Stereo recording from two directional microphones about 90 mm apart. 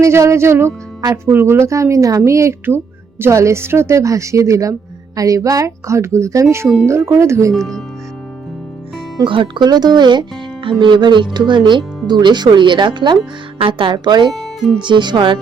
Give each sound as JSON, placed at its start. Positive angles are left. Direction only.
{"t": 0.0, "sound": "music", "side_deg": -35}
{"t": 1.1, "sound": "a woman's voice", "side_deg": -25}
{"t": 7.5, "sound": "speech", "side_deg": 5}
{"t": 9.2, "sound": "speech", "side_deg": -65}
{"t": 13.6, "sound": "speech", "side_deg": -70}